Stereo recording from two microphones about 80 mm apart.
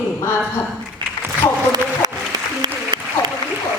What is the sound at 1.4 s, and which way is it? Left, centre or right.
Speech, left.